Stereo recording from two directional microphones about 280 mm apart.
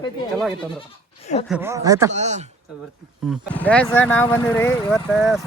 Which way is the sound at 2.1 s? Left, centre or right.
Right.